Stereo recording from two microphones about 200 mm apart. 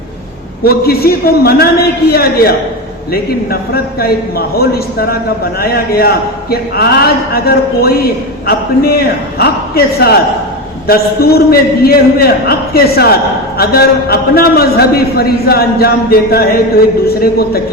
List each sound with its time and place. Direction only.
0.6 s a man's voice: 50° left (ahead or behind)